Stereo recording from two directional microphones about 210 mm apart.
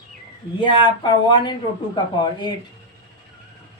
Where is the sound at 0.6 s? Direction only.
20° left (ahead or behind).